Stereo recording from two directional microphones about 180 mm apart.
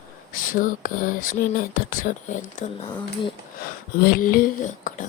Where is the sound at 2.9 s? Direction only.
25° left (ahead or behind).